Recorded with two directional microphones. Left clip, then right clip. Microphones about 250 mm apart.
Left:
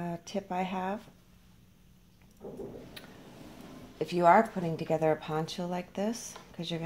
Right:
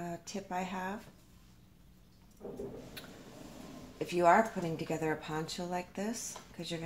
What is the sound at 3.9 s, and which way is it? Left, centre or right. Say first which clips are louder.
Speech: left 4 dB; left.